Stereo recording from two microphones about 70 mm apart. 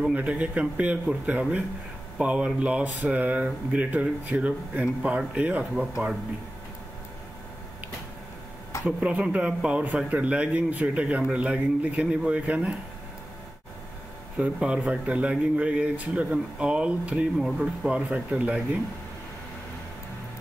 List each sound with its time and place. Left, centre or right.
0.1 s speech: right
8.8 s a man's voice: centre
14.3 s a man's voice: centre